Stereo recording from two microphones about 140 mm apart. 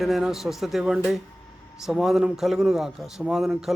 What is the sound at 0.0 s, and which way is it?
A man's voice, centre (ahead or behind).